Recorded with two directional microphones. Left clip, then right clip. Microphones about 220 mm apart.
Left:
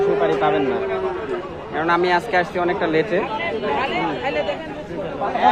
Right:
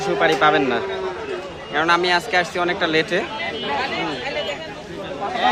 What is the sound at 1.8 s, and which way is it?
Speech, 5° right (ahead or behind).